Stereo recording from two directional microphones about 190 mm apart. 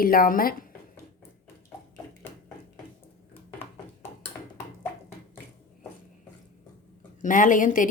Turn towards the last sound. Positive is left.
turn(degrees=45)  # may be behind; listen again after turning